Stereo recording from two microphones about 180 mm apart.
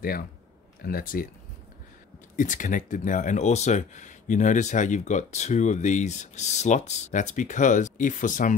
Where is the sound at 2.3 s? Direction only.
45° left (ahead or behind).